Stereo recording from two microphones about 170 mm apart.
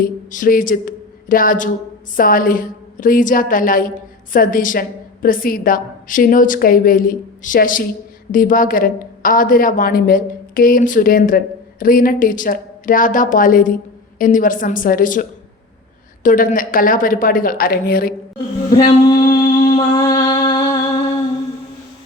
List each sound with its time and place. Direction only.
0.0 s a woman's voice: 50° left (ahead or behind)
18.7 s music: 25° left (ahead or behind)